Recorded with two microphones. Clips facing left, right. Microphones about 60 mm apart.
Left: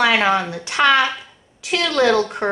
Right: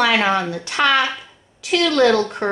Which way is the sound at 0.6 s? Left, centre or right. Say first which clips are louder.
Left 2 dB; centre.